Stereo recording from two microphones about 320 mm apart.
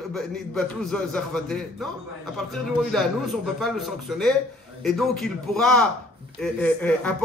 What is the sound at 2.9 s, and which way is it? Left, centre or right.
Speech, centre.